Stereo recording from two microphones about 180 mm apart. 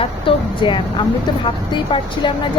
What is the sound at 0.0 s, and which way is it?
A woman's voice, 30° left (ahead or behind).